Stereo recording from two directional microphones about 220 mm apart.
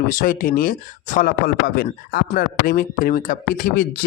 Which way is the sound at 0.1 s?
40° left (ahead or behind).